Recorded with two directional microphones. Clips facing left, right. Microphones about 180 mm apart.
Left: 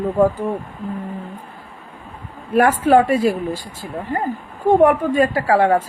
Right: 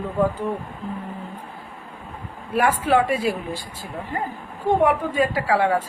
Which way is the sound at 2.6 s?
45° left (ahead or behind).